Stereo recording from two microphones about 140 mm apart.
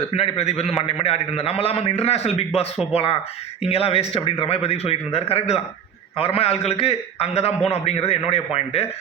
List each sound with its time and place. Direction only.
0.1 s a man's voice: 50° left (ahead or behind)